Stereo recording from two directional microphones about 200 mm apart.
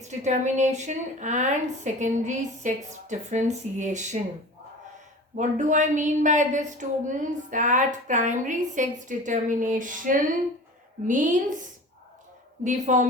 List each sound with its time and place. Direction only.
0.0 s speech: 35° right (ahead or behind)
5.4 s speech: 40° right (ahead or behind)
12.6 s speech: 40° right (ahead or behind)